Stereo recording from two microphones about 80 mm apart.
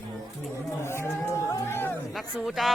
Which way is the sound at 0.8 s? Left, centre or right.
Left.